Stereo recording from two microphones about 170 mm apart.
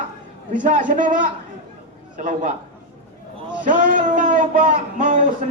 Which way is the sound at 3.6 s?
50° right (ahead or behind).